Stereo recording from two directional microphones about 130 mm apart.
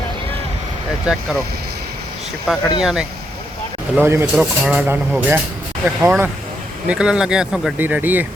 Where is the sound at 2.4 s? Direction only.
Centre (ahead or behind).